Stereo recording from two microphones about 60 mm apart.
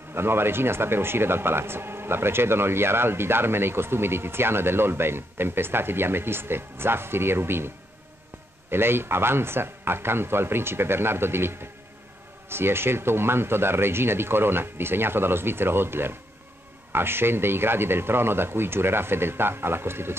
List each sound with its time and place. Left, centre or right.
0.1 s speech: right